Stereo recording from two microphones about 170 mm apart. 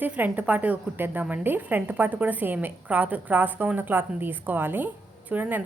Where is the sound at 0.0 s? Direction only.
10° right (ahead or behind).